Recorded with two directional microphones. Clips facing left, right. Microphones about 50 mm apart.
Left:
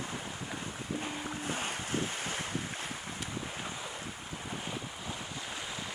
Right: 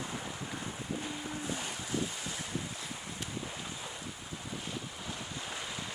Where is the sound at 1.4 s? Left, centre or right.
Left.